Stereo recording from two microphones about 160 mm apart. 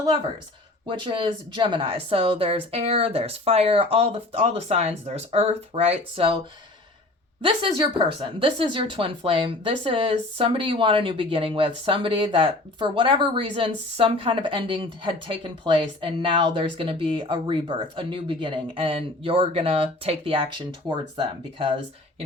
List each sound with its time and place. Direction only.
0.9 s speech: 30° right (ahead or behind)
7.4 s speech: 35° right (ahead or behind)